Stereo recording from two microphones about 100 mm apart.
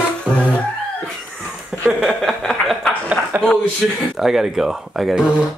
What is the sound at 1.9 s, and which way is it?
Chuckle, 5° right (ahead or behind).